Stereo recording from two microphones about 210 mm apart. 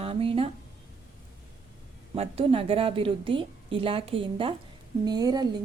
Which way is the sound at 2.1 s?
25° right (ahead or behind).